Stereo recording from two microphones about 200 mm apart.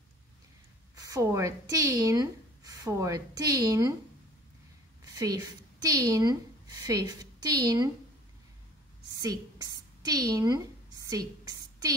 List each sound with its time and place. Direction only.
1.0 s a woman's voice: 15° right (ahead or behind)
5.1 s a woman's voice: 20° right (ahead or behind)
9.2 s a sound: 20° right (ahead or behind)